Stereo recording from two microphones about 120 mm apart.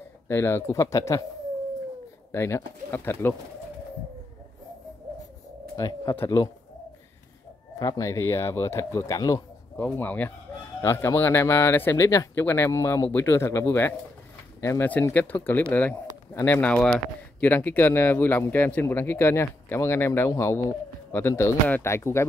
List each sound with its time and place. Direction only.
0.3 s speech: 20° left (ahead or behind)
2.3 s speech: 20° left (ahead or behind)
5.8 s speech: 30° left (ahead or behind)
7.8 s speech: 25° left (ahead or behind)
9.8 s speech: 15° left (ahead or behind)